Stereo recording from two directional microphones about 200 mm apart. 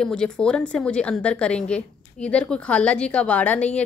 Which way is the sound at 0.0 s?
5° left (ahead or behind).